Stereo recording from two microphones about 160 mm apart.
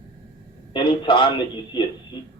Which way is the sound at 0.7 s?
30° left (ahead or behind).